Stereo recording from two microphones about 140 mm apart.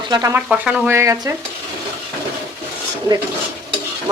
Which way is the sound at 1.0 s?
20° right (ahead or behind).